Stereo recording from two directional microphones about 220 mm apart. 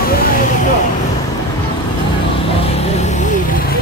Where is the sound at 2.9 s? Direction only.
30° left (ahead or behind).